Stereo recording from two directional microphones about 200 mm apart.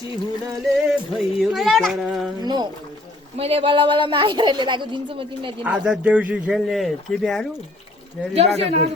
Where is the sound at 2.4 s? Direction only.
20° right (ahead or behind).